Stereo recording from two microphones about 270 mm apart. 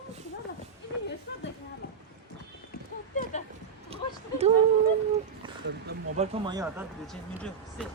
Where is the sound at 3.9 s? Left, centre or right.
Right.